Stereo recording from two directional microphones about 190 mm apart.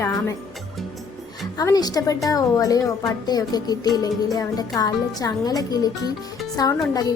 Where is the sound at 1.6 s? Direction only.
20° left (ahead or behind).